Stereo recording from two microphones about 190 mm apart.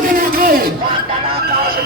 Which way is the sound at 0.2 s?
50° right (ahead or behind).